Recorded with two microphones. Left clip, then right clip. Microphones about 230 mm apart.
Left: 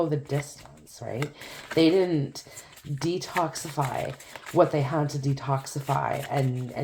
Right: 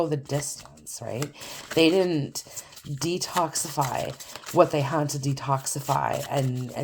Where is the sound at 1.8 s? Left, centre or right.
Right.